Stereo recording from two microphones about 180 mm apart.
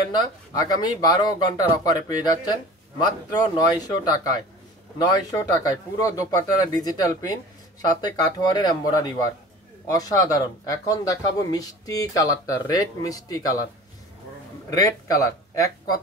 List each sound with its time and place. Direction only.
0.1 s speech: 20° left (ahead or behind)
14.7 s speech: 20° left (ahead or behind)